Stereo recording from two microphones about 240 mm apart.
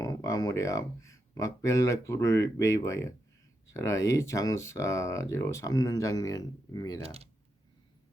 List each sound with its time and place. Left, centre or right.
0.0 s speech: centre
7.0 s speech: right